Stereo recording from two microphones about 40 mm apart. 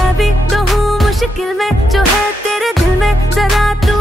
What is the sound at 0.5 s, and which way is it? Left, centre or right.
Music, centre.